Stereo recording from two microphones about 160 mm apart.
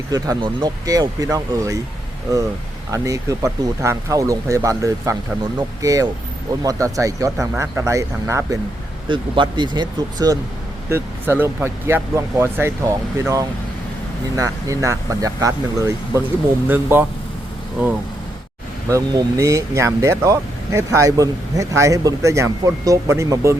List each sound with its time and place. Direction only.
0.1 s speech: 25° right (ahead or behind)
2.9 s speech: 20° right (ahead or behind)
9.0 s speech: 30° right (ahead or behind)
10.8 s speech: 15° right (ahead or behind)
18.9 s speech: 20° right (ahead or behind)